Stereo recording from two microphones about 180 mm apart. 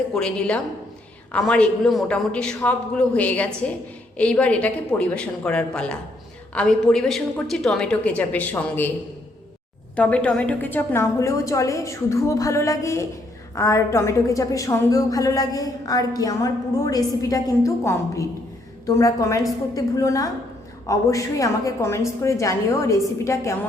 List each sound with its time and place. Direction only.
0.1 s a man's voice: 5° left (ahead or behind)
9.9 s a woman's voice: 5° left (ahead or behind)